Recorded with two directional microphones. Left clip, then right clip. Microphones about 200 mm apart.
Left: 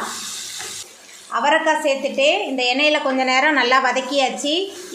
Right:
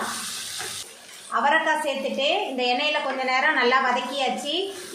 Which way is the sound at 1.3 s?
30° left (ahead or behind).